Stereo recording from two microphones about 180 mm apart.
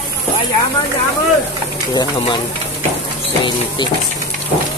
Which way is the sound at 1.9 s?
25° left (ahead or behind).